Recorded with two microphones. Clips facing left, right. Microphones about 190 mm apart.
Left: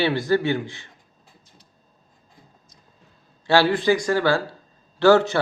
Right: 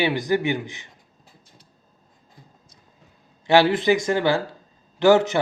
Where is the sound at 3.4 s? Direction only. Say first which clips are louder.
Right 1 dB; 20° right (ahead or behind).